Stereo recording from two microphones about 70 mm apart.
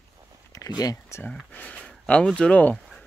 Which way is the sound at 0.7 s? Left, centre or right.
Left.